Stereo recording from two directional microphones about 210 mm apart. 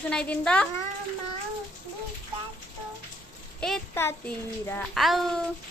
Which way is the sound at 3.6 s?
5° left (ahead or behind).